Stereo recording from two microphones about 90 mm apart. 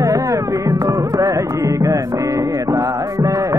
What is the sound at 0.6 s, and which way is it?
Music, 40° right (ahead or behind).